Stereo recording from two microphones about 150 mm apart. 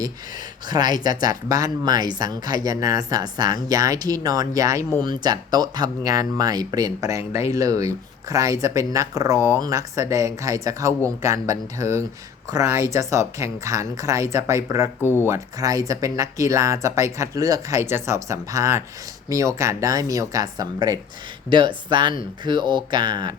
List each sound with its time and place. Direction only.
0.7 s speech: 30° right (ahead or behind)
15.0 s speech: 15° left (ahead or behind)
15.3 s speech: 20° right (ahead or behind)